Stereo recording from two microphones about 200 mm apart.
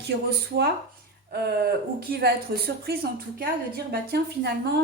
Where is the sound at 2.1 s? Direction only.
55° right (ahead or behind).